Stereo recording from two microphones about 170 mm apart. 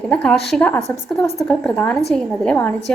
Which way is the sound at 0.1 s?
5° left (ahead or behind).